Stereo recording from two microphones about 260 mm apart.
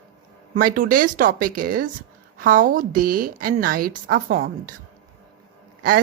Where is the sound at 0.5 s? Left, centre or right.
Right.